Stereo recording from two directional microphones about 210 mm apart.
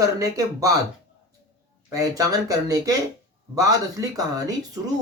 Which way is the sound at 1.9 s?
15° right (ahead or behind).